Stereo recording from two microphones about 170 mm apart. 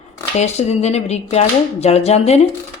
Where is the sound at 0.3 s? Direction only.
40° left (ahead or behind).